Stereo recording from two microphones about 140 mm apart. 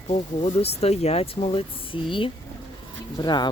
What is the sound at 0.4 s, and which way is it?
Speech, 45° left (ahead or behind).